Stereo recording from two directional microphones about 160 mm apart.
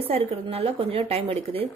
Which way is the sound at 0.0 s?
35° right (ahead or behind).